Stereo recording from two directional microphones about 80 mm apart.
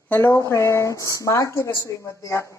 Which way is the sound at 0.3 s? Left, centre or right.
Left.